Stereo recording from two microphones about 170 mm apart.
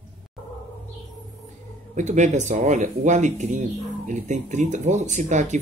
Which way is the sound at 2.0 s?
45° right (ahead or behind).